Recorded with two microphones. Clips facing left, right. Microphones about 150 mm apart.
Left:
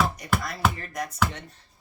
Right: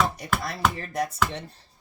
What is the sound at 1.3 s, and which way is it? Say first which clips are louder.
Speech: right 5 dB; 30° right (ahead or behind).